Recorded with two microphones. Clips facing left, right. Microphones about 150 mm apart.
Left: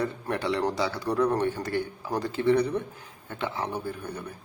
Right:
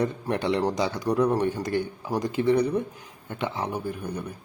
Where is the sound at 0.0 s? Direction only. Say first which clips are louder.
Right 3 dB; 20° right (ahead or behind).